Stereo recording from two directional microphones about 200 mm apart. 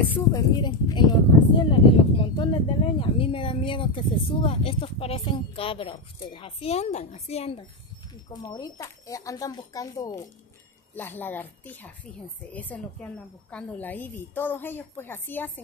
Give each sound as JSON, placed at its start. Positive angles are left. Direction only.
{"t": 0.1, "sound": "speech", "side_deg": 20}
{"t": 8.3, "sound": "a woman's voice", "side_deg": 20}